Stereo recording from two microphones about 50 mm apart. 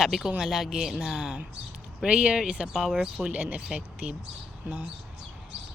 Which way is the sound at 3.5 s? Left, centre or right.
Right.